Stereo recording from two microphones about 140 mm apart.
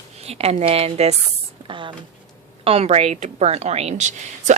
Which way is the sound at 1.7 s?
35° right (ahead or behind).